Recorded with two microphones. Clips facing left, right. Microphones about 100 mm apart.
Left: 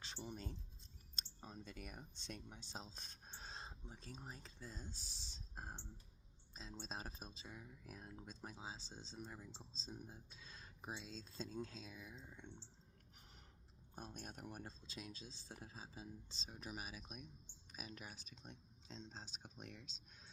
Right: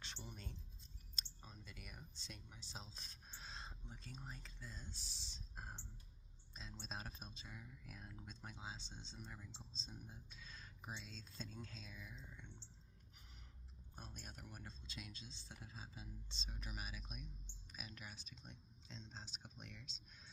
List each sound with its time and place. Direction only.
0.0 s speech: 30° left (ahead or behind)
1.5 s speech: 40° left (ahead or behind)
2.6 s a sound: 45° left (ahead or behind)
3.9 s speech: 35° left (ahead or behind)
9.3 s speech: 20° left (ahead or behind)
9.7 s speech: 35° left (ahead or behind); by 12.6 s 15° left (ahead or behind)
13.9 s speech: 45° left (ahead or behind)